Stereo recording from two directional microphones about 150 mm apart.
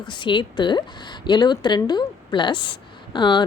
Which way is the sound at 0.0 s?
30° left (ahead or behind).